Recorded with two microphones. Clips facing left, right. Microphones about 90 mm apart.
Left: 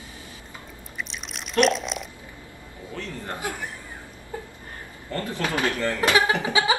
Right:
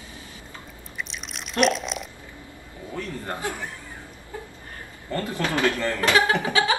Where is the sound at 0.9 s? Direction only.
Centre (ahead or behind).